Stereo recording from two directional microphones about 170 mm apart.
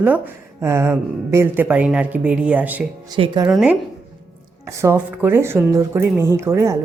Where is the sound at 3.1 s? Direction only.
25° right (ahead or behind).